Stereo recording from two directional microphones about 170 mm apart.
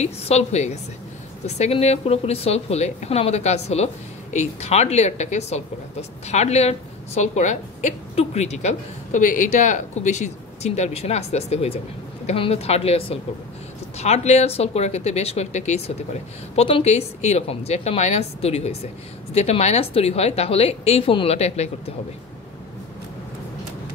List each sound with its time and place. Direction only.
0.0 s a woman's voice: 40° left (ahead or behind)